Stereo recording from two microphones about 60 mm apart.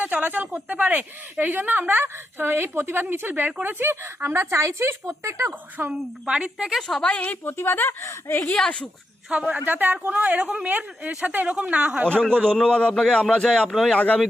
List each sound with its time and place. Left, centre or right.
0.0 s a woman's voice: right
5.5 s speech: right
5.9 s a woman's voice: centre
6.8 s a man's voice: centre
7.4 s speech: left
8.5 s a man's voice: centre
9.6 s speech: right
10.1 s a woman's voice: centre
12.3 s a man's voice: centre
13.9 s speech: left